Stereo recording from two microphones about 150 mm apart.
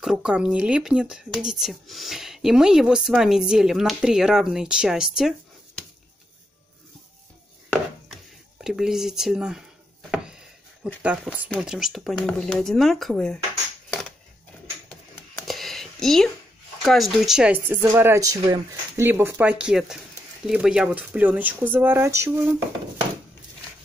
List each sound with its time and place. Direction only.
0.0 s speech: 5° right (ahead or behind)
8.1 s speech: 5° right (ahead or behind)
11.0 s speech: 10° right (ahead or behind)
15.4 s a sound: centre (ahead or behind)
16.8 s speech: centre (ahead or behind); by 22.6 s 20° right (ahead or behind)